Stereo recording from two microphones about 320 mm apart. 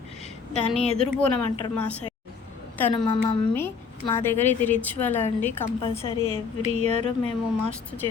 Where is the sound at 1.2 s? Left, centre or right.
Centre.